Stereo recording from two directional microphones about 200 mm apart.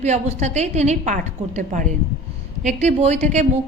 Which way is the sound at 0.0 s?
35° right (ahead or behind).